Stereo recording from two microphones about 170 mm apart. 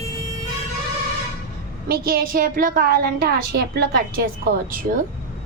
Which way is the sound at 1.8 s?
60° right (ahead or behind).